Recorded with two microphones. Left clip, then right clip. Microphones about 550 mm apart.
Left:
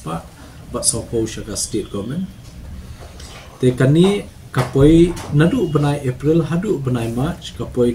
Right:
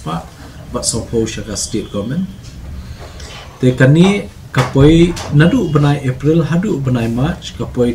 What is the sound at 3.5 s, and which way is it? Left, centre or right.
Speech, left.